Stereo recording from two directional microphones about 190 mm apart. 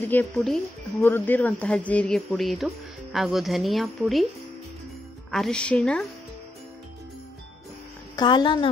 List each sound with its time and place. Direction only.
0.0 s speech: 10° left (ahead or behind)
5.3 s speech: 5° left (ahead or behind)
8.2 s a woman's voice: 25° left (ahead or behind)